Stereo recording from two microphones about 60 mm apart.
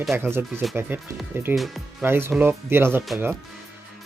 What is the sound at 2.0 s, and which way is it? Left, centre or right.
Speech, right.